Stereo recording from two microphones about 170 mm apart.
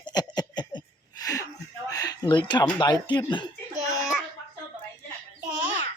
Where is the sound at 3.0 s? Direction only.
25° left (ahead or behind).